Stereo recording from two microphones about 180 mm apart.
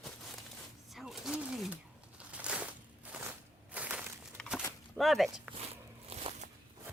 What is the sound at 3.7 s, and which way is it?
Crushing, 5° right (ahead or behind).